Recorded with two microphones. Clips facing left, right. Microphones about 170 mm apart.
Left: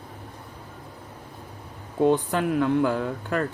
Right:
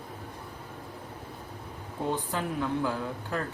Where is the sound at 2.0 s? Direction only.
70° left (ahead or behind).